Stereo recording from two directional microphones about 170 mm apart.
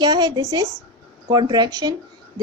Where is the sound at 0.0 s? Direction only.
25° right (ahead or behind).